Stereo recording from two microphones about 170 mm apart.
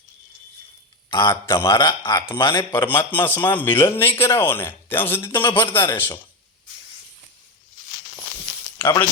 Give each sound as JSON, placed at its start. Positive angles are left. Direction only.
{"t": 1.1, "sound": "a man's voice", "side_deg": 25}
{"t": 1.7, "sound": "a man's voice", "side_deg": 25}
{"t": 2.7, "sound": "a man's voice", "side_deg": 10}
{"t": 8.8, "sound": "speech", "side_deg": 15}